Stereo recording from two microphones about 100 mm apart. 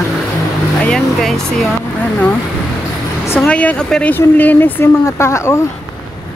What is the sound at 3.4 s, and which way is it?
Speech, 10° left (ahead or behind).